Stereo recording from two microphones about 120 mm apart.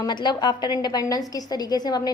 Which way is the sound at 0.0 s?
40° left (ahead or behind).